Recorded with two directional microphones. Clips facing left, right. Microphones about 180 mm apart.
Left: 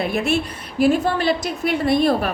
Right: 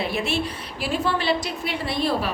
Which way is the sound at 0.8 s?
45° left (ahead or behind).